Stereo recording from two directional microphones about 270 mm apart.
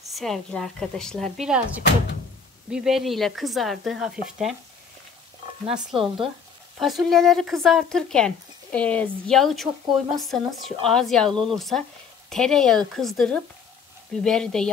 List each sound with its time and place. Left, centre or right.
0.1 s speech: centre
2.7 s speech: centre
5.9 s speech: centre
6.8 s speech: centre
11.2 s speech: centre
11.5 s speech: centre